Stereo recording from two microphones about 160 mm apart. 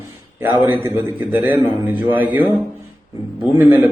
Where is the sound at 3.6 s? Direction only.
10° right (ahead or behind).